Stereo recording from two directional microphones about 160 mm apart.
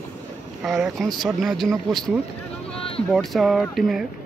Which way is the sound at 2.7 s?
35° left (ahead or behind).